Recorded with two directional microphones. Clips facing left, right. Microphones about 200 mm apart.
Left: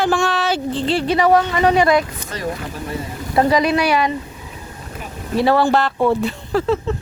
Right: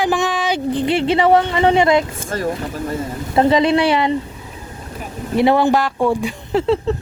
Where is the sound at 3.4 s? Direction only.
25° right (ahead or behind).